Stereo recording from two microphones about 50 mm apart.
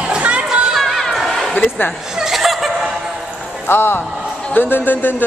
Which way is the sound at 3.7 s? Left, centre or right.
Left.